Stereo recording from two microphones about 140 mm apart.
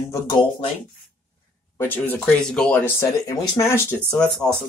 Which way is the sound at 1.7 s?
15° left (ahead or behind).